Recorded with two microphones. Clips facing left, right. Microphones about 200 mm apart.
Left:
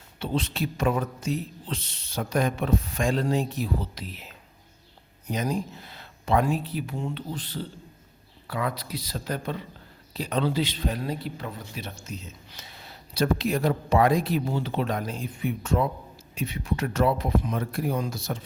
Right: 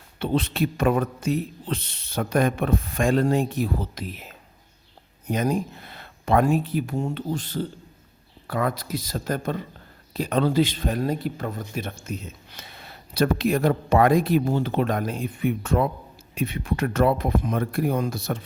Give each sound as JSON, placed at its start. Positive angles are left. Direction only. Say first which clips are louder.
{"t": 0.2, "sound": "speech", "louder": "right 5 dB", "side_deg": -55}